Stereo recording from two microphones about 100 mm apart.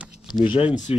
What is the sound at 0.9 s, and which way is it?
Speech, 75° left (ahead or behind).